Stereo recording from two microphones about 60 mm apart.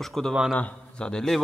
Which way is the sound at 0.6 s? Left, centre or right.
Left.